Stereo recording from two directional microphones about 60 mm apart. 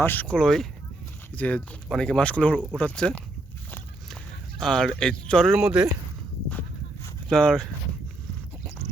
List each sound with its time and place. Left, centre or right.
0.0 s speech: left
0.3 s speech: centre
1.4 s speech: left
5.5 s speech: centre
7.3 s speech: centre